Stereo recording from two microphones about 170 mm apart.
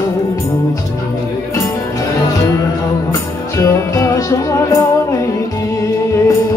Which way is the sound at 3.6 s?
20° left (ahead or behind).